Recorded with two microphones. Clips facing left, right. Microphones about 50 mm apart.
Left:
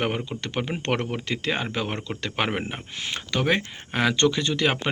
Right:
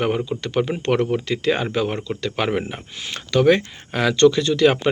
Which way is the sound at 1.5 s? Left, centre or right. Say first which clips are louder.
Right 7 dB; centre.